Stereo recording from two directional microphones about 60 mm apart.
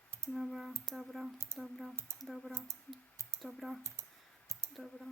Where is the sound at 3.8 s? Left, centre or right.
Right.